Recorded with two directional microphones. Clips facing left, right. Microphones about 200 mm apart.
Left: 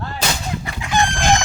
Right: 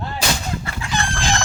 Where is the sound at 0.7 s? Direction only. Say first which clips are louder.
Even; 15° left (ahead or behind).